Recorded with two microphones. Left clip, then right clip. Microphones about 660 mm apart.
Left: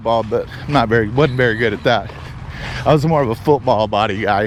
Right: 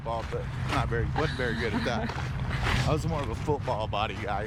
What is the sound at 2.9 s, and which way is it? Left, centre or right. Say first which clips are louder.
Speech: left 17 dB; left.